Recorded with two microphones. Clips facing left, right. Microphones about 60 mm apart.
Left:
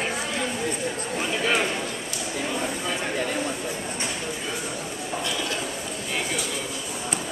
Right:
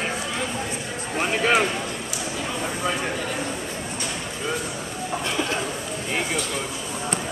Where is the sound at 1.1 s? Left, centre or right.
Right.